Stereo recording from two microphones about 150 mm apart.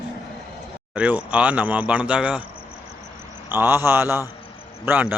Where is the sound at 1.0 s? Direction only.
10° right (ahead or behind).